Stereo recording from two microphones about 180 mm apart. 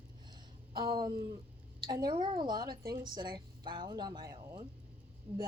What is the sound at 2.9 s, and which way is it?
A woman's voice, 25° right (ahead or behind).